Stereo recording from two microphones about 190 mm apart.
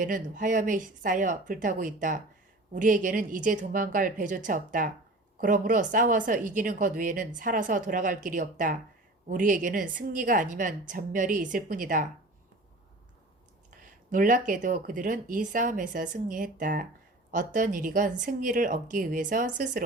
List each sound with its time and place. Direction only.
0.0 s speech: 45° right (ahead or behind)
14.1 s speech: 45° right (ahead or behind)